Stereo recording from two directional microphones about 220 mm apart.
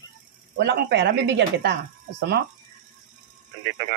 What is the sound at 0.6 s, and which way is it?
Speech, 50° right (ahead or behind).